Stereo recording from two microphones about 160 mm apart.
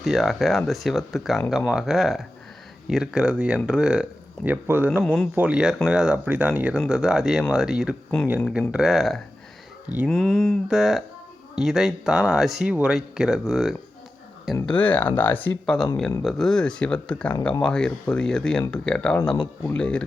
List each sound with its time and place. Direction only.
0.0 s speech: centre (ahead or behind)
5.0 s speech: 5° left (ahead or behind)
5.3 s speech: 10° right (ahead or behind)
14.7 s speech: 10° left (ahead or behind)